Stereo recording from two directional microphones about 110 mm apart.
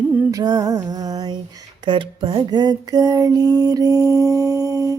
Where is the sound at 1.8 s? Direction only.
45° right (ahead or behind).